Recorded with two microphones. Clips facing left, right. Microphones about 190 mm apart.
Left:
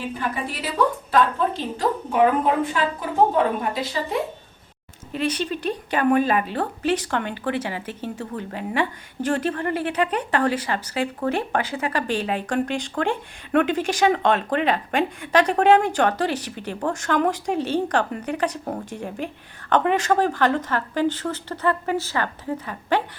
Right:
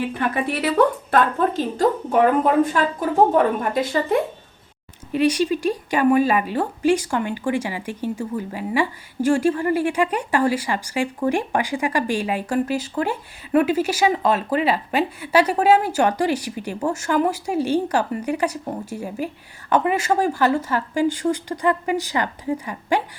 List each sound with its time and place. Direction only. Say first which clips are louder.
0.1 s a woman's voice: right 5 dB; 65° right (ahead or behind); by 1.8 s 45° right (ahead or behind)
3.3 s a woman's voice: right 3 dB; 50° right (ahead or behind)
5.1 s speech: right 6 dB; 10° right (ahead or behind)